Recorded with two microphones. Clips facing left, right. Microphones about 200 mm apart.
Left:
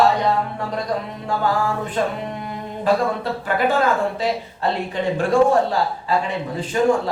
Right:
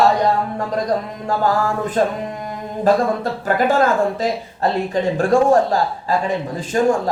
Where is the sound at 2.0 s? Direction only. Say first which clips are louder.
Right 5 dB; 40° right (ahead or behind).